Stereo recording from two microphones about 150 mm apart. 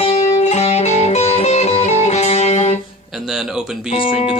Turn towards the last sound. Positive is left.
turn(degrees=35)  # may be behind; listen again after turning